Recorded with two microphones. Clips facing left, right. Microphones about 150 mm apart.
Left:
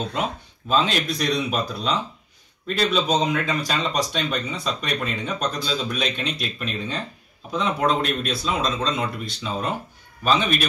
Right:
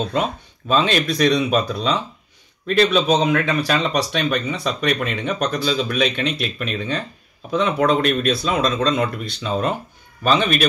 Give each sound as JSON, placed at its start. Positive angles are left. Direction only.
{"t": 0.7, "sound": "speech", "side_deg": -70}